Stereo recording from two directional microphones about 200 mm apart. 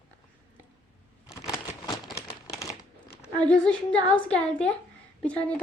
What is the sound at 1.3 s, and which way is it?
Crumpling, 15° left (ahead or behind).